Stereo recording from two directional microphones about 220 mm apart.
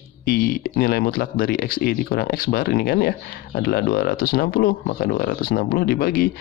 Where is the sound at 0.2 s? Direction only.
45° left (ahead or behind).